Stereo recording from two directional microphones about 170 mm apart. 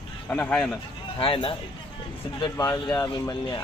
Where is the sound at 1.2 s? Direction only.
30° left (ahead or behind).